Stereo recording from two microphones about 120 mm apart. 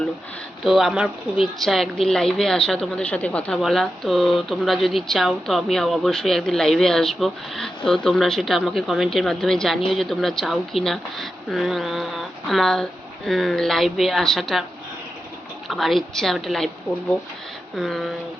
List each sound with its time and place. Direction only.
0.6 s speech: 5° right (ahead or behind)
15.6 s speech: centre (ahead or behind)
17.7 s speech: centre (ahead or behind)